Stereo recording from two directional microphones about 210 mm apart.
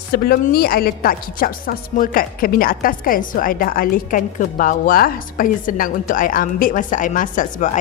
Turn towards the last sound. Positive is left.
turn(degrees=40)  # may be behind; listen again after turning